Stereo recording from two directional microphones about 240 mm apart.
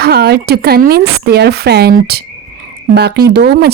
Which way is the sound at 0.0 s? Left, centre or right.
Right.